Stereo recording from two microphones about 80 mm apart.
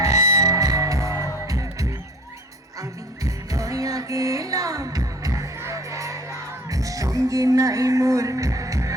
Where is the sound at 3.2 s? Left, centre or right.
Right.